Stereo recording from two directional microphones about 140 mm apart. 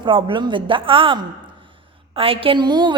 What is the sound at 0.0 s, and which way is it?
A woman's voice, 35° right (ahead or behind).